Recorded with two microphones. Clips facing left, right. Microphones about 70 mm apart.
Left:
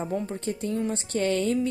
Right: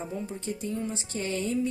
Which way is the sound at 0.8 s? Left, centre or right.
Left.